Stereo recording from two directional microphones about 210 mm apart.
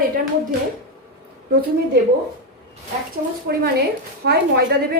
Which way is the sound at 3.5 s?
45° right (ahead or behind).